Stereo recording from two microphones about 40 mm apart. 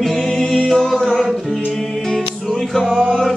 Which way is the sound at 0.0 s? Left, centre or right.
Centre.